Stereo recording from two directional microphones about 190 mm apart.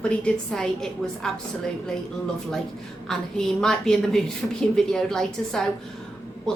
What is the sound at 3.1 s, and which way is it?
Speech, 5° left (ahead or behind).